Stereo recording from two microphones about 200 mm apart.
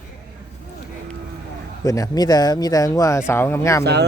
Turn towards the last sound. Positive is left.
turn(degrees=-55)  # may be behind; listen again after turning